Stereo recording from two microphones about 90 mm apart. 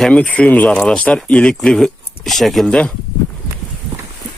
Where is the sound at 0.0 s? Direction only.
10° left (ahead or behind).